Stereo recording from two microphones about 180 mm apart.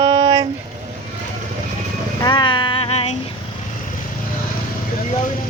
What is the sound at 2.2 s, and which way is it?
Music, 25° left (ahead or behind).